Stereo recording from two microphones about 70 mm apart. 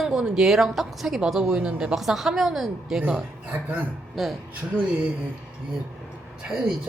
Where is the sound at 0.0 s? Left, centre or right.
Centre.